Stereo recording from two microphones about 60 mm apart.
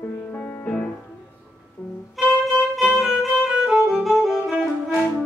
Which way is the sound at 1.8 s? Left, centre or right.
Left.